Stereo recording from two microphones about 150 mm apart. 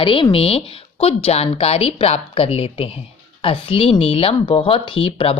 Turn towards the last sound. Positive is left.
turn(degrees=40)  # may be behind; listen again after turning